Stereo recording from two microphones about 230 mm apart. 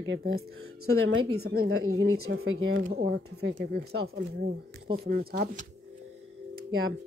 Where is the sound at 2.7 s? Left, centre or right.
Right.